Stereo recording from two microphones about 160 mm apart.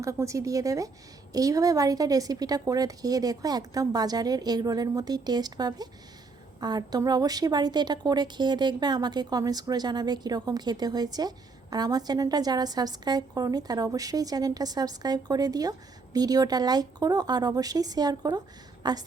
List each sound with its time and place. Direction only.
0.0 s a woman's voice: 20° right (ahead or behind)